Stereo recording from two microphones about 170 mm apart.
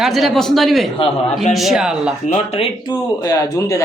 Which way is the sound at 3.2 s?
20° left (ahead or behind).